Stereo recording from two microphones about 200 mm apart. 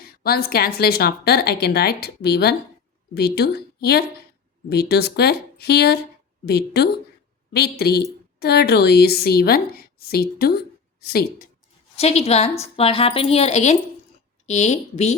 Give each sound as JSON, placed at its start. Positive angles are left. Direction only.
{"t": 0.0, "sound": "a woman's voice", "side_deg": 50}
{"t": 11.9, "sound": "a woman's voice", "side_deg": 30}